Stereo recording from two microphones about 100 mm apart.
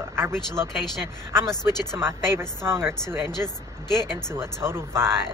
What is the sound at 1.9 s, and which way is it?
Speech, 25° right (ahead or behind).